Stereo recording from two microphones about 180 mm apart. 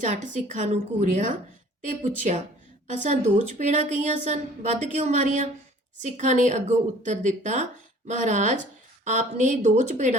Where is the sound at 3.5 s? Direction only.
40° right (ahead or behind).